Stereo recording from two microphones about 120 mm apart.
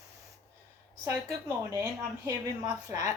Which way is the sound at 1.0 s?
25° right (ahead or behind).